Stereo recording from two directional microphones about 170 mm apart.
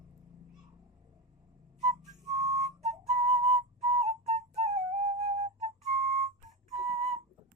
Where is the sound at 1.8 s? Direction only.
40° right (ahead or behind).